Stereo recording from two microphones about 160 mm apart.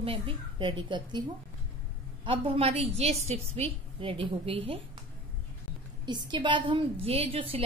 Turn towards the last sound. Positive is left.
turn(degrees=-35)  # may be behind; listen again after turning